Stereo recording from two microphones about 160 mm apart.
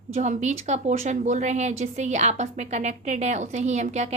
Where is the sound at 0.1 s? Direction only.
50° right (ahead or behind).